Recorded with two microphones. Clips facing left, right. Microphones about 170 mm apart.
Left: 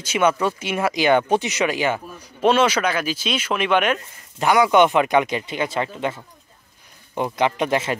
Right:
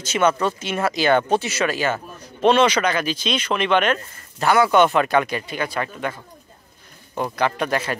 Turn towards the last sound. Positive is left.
turn(degrees=20)  # may be behind; listen again after turning